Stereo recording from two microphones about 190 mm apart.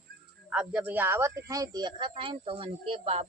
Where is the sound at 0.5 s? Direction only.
5° right (ahead or behind); by 3.2 s 30° right (ahead or behind).